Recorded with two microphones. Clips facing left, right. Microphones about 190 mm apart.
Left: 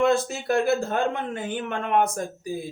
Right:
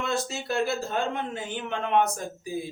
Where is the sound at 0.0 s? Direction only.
55° left (ahead or behind).